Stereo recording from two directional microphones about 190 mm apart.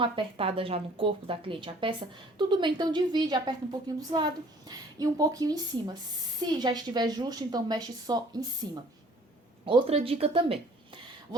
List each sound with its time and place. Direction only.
0.0 s a woman's voice: 30° right (ahead or behind)